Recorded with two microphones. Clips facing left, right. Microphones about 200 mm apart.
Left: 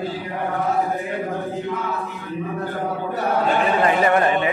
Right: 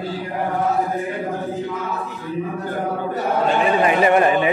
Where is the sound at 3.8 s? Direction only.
20° right (ahead or behind).